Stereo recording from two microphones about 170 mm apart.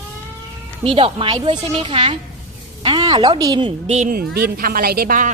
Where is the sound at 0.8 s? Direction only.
35° right (ahead or behind).